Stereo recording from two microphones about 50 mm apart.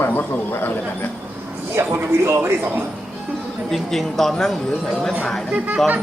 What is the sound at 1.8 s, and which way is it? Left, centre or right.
Speech, right.